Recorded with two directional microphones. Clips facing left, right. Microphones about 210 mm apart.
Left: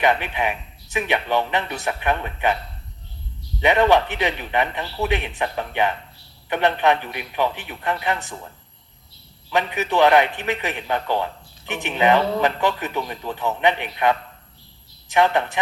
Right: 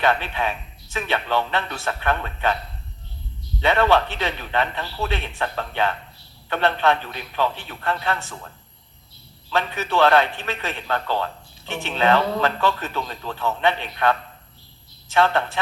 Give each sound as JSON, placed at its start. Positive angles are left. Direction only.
{"t": 0.0, "sound": "a man's voice", "side_deg": 15}
{"t": 3.6, "sound": "a man's voice", "side_deg": 15}
{"t": 9.5, "sound": "a man's voice", "side_deg": 15}